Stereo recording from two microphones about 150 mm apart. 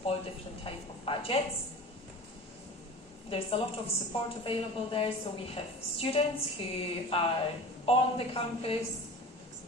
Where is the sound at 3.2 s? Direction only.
40° left (ahead or behind).